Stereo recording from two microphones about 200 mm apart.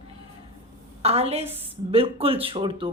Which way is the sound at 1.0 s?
30° right (ahead or behind).